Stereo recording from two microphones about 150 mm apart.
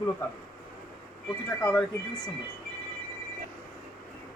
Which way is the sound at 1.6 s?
5° left (ahead or behind).